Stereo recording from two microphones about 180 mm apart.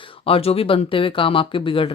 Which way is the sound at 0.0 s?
30° left (ahead or behind).